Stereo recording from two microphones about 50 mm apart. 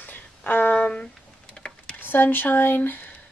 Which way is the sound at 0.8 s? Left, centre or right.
Centre.